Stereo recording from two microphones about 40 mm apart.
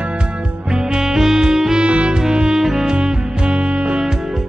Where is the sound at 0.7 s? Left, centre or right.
Centre.